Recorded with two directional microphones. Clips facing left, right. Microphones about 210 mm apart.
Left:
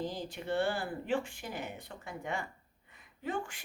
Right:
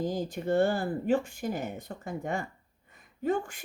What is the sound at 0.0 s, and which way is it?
A woman's voice, 45° right (ahead or behind).